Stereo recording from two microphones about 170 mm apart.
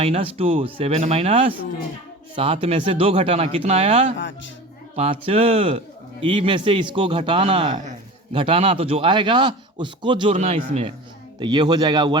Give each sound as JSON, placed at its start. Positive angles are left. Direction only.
{"t": 0.0, "sound": "a man's voice", "side_deg": -35}
{"t": 11.3, "sound": "a man's voice", "side_deg": -25}